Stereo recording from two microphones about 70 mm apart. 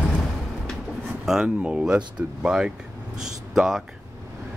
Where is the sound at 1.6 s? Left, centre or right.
Centre.